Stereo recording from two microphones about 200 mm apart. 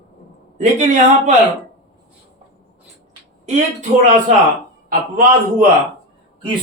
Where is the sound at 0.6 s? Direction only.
35° right (ahead or behind).